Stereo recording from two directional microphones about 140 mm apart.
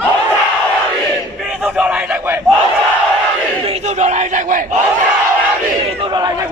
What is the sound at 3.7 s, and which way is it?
Speech, 50° right (ahead or behind).